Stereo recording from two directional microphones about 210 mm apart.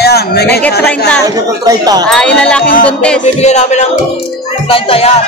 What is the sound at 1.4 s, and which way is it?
Speech, 15° right (ahead or behind).